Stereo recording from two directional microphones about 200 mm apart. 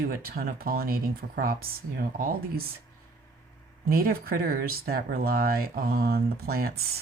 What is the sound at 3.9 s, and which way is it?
Speech, 50° right (ahead or behind).